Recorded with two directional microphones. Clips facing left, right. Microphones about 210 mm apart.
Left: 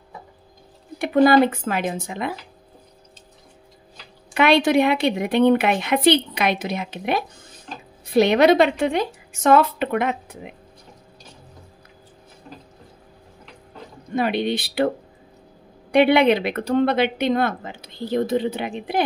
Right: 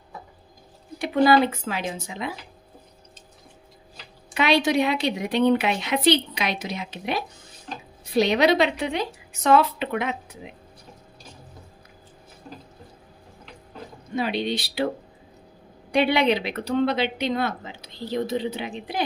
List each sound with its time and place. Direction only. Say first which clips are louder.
0.9 s a woman's voice: left 3 dB; 55° left (ahead or behind)
4.3 s a woman's voice: left 4 dB; 55° left (ahead or behind)
14.1 s a woman's voice: left 4 dB; 55° left (ahead or behind)
15.9 s speech: left 5 dB; 55° left (ahead or behind)